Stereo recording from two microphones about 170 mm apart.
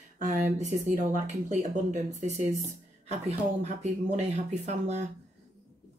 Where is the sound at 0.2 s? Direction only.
45° right (ahead or behind).